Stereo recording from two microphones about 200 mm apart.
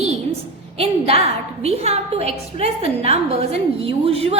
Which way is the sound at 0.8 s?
30° right (ahead or behind).